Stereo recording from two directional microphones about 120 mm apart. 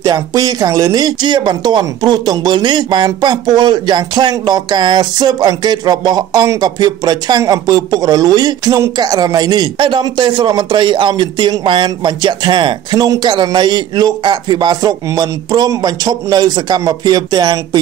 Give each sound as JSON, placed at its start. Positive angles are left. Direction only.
{"t": 0.0, "sound": "speech", "side_deg": -30}